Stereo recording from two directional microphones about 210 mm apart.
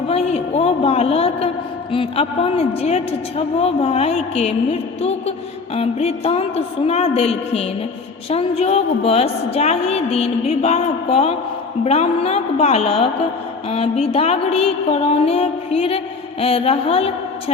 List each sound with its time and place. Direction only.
0.1 s a woman's voice: 30° left (ahead or behind)